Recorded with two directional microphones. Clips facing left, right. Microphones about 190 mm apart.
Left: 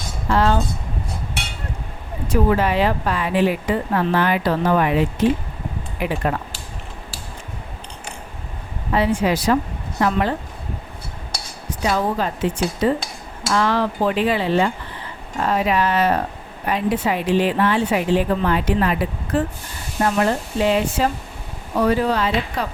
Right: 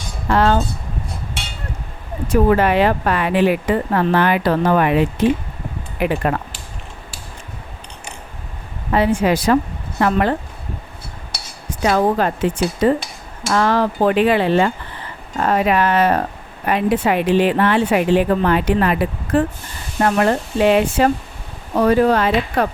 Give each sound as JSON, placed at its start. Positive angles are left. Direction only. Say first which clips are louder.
{"t": 0.3, "sound": "speech", "louder": "right 2 dB", "side_deg": -60}
{"t": 2.2, "sound": "speech", "louder": "right 4 dB", "side_deg": -50}
{"t": 8.9, "sound": "speech", "louder": "right 3 dB", "side_deg": -55}
{"t": 11.8, "sound": "speech", "louder": "right 5 dB", "side_deg": -60}
{"t": 21.8, "sound": "speech", "louder": "right 4 dB", "side_deg": -50}